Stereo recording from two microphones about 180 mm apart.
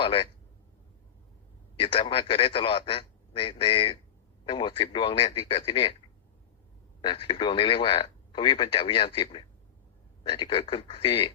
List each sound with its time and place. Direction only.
0.0 s a man's voice: 30° left (ahead or behind)
1.8 s speech: 30° left (ahead or behind)
7.0 s speech: 25° left (ahead or behind)